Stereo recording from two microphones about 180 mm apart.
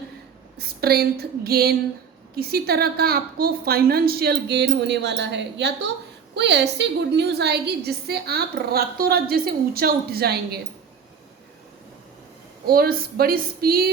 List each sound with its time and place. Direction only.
0.5 s a woman's voice: 60° right (ahead or behind)
12.6 s a woman's voice: 55° right (ahead or behind)